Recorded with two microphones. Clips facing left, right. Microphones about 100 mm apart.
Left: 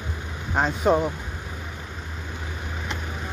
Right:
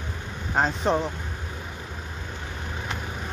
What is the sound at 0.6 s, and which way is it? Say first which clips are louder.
Speech: left 2 dB; 10° left (ahead or behind).